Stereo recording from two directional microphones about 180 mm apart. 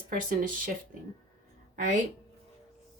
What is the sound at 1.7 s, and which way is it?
Speech, 45° right (ahead or behind).